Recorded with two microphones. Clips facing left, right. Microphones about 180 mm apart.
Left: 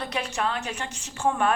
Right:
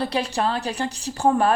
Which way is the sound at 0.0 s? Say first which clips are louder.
Right 5 dB; 35° right (ahead or behind).